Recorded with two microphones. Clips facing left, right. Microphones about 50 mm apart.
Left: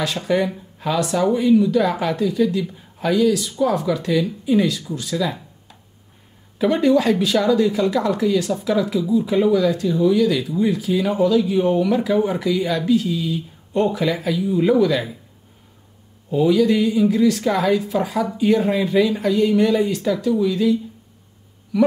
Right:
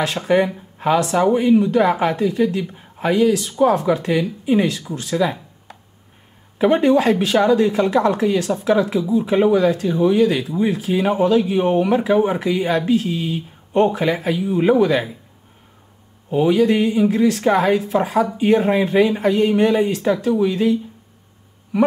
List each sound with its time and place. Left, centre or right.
0.0 s speech: right
6.6 s speech: right
16.3 s speech: right